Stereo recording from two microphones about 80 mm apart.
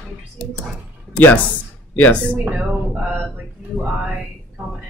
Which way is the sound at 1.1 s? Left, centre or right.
Centre.